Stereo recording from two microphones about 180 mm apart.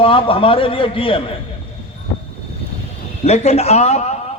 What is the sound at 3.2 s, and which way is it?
Speech, 35° left (ahead or behind).